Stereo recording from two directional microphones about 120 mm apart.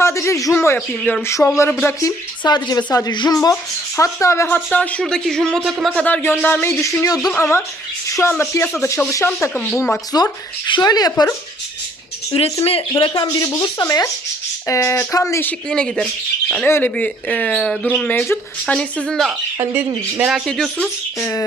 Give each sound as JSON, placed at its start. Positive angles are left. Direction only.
{"t": 0.0, "sound": "a man's voice", "side_deg": 25}
{"t": 10.1, "sound": "speech", "side_deg": 35}
{"t": 12.3, "sound": "speech", "side_deg": 55}
{"t": 12.9, "sound": "speech", "side_deg": 35}
{"t": 15.7, "sound": "speech", "side_deg": 5}
{"t": 16.6, "sound": "speech", "side_deg": 20}
{"t": 20.4, "sound": "speech", "side_deg": 5}
{"t": 21.2, "sound": "speech", "side_deg": 25}